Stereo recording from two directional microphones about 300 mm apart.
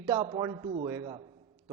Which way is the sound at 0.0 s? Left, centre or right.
Centre.